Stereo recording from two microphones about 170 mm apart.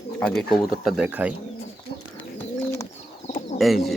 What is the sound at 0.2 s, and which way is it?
Speech, 5° left (ahead or behind).